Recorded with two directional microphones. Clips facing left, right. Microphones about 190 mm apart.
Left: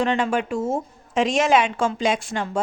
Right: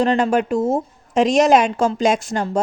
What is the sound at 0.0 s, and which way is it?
Speech, 40° right (ahead or behind).